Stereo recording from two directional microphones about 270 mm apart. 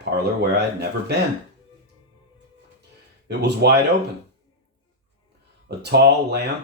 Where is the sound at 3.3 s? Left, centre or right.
Right.